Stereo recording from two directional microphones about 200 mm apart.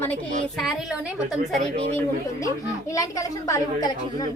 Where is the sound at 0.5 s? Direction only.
Centre (ahead or behind).